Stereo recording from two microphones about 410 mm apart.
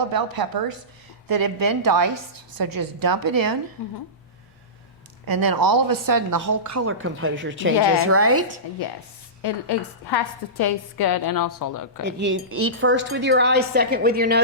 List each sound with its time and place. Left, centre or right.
0.4 s a woman's voice: right
3.8 s speech: left
5.2 s a woman's voice: right
9.4 s a woman's voice: left
12.0 s speech: right